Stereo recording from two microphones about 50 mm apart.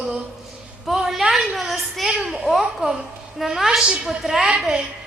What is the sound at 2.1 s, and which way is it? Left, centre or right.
A woman's voice, centre.